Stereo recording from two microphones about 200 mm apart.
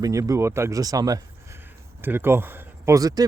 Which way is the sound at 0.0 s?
15° right (ahead or behind).